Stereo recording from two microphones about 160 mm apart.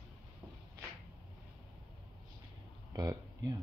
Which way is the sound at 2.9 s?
25° right (ahead or behind).